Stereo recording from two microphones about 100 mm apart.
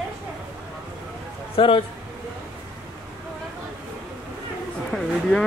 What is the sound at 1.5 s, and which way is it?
Speech, 70° left (ahead or behind).